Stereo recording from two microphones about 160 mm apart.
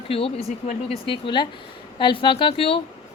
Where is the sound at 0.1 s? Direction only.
35° left (ahead or behind).